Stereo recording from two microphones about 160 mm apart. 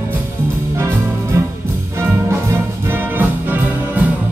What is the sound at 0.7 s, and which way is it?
Music, 15° right (ahead or behind).